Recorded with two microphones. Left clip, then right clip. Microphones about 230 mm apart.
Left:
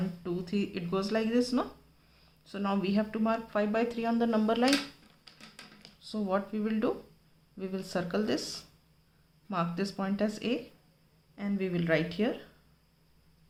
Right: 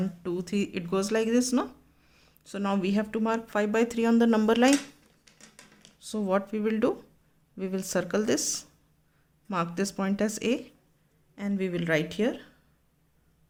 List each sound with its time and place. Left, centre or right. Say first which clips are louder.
0.2 s speech: right 3 dB; right
6.0 s speech: right 4 dB; right